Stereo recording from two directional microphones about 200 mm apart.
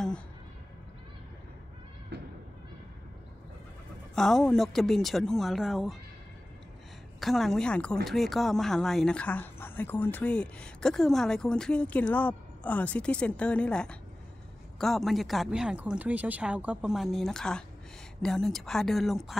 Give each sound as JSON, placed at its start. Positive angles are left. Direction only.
{"t": 2.1, "sound": "a sound", "side_deg": -60}
{"t": 4.1, "sound": "speech", "side_deg": 0}
{"t": 7.2, "sound": "speech", "side_deg": 0}